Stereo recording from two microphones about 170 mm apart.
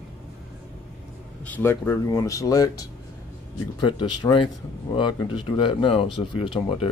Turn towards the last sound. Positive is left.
turn(degrees=30)  # may be behind; listen again after turning